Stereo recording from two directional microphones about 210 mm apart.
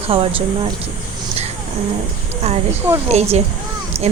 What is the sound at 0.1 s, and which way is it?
Speech, 25° right (ahead or behind).